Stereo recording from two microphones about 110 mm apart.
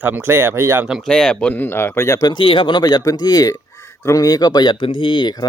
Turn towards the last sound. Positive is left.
turn(degrees=45)  # may be behind; listen again after turning